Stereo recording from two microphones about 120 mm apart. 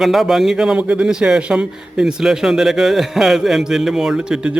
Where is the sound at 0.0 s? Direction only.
Centre (ahead or behind).